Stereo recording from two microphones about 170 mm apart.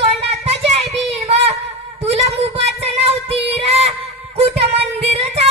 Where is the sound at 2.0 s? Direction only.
40° right (ahead or behind).